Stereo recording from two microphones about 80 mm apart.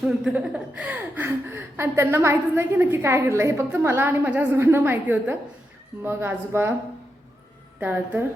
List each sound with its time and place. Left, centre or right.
0.3 s a woman's voice: centre; by 6.7 s right
7.8 s a woman's voice: right